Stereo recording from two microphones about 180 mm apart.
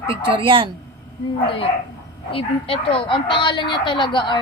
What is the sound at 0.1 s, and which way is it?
Speech, 30° right (ahead or behind).